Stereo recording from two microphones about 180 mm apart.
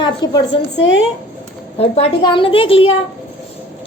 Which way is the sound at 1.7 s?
35° left (ahead or behind).